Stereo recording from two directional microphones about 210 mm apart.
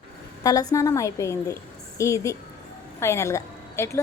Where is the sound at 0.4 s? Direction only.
15° left (ahead or behind).